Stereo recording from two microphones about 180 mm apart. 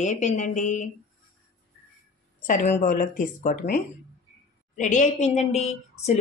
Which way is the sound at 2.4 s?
40° left (ahead or behind).